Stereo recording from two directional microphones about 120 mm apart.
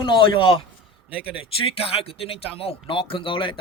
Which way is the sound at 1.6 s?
55° left (ahead or behind).